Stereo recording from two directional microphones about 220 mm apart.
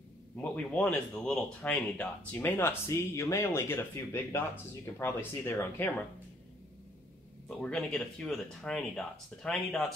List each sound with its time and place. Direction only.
0.4 s speech: 5° left (ahead or behind)
7.4 s speech: 5° left (ahead or behind)